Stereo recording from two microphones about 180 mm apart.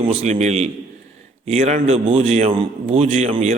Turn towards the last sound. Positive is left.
turn(degrees=-40)  # may be behind; listen again after turning